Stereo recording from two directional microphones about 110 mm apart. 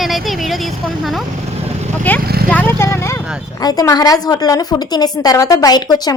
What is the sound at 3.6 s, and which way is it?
A woman's voice, 35° left (ahead or behind).